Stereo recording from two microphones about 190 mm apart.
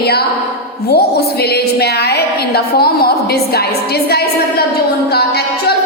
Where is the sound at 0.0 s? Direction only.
55° left (ahead or behind).